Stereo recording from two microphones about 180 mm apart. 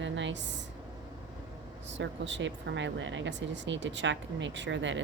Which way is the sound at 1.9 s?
90° right.